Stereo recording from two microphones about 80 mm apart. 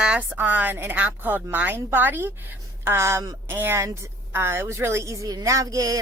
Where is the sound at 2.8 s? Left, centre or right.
Right.